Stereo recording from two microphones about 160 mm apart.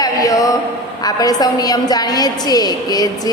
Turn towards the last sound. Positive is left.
turn(degrees=25)  # may be behind; listen again after turning